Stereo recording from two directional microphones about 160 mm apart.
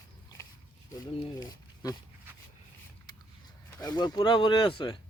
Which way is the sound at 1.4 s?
25° left (ahead or behind).